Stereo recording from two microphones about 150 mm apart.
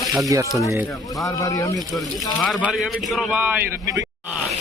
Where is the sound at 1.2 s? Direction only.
25° left (ahead or behind).